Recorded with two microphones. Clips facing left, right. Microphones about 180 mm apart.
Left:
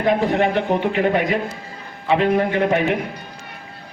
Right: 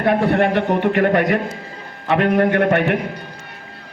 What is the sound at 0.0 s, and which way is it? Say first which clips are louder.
A man's voice: right 2 dB; 60° right (ahead or behind).